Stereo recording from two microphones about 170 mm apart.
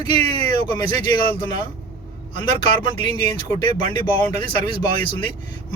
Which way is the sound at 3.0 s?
25° left (ahead or behind).